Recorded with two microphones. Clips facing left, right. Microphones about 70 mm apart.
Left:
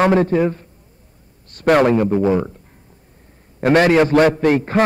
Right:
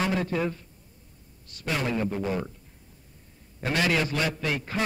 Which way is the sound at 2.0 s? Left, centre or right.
Left.